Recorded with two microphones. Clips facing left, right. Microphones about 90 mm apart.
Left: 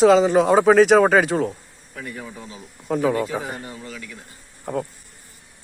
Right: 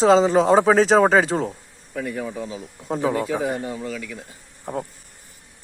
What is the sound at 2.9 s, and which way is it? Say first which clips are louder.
Speech: left 1 dB; 25° right (ahead or behind).